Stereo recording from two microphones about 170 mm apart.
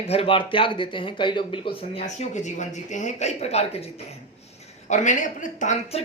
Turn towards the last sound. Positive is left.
turn(degrees=40)  # may be behind; listen again after turning